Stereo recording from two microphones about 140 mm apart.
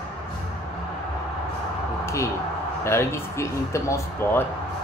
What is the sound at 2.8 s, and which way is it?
Speech, 20° left (ahead or behind).